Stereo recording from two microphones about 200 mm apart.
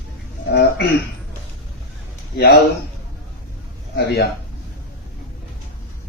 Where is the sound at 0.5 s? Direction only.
55° left (ahead or behind).